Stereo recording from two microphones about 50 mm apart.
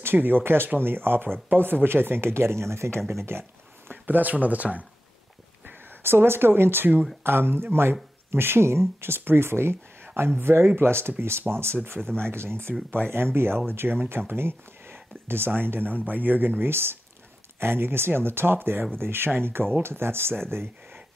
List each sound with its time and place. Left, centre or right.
0.0 s speech: right
3.3 s speech: right
3.9 s speech: right
5.7 s speech: right
12.0 s speech: centre
12.3 s speech: right